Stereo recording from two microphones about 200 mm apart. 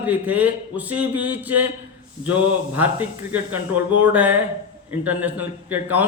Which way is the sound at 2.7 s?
10° right (ahead or behind).